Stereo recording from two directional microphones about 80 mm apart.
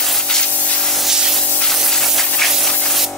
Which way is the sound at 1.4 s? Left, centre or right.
Centre.